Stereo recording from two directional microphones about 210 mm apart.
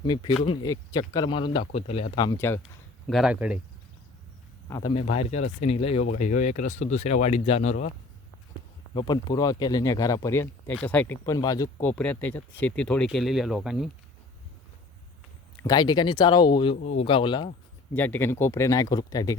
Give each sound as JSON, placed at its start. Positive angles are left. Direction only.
{"t": 0.0, "sound": "speech", "side_deg": 20}
{"t": 3.1, "sound": "speech", "side_deg": 0}
{"t": 4.9, "sound": "speech", "side_deg": 30}
{"t": 9.0, "sound": "speech", "side_deg": 20}
{"t": 15.6, "sound": "speech", "side_deg": 20}
{"t": 17.9, "sound": "speech", "side_deg": 10}